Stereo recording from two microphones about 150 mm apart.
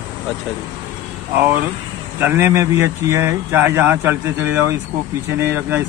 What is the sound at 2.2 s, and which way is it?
Speech, 15° right (ahead or behind).